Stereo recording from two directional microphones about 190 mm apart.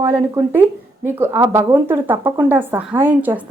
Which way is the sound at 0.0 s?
15° right (ahead or behind).